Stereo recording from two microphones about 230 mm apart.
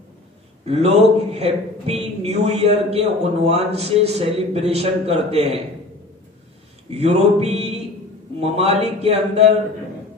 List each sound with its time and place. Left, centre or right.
0.7 s a man's voice: right
6.9 s a man's voice: right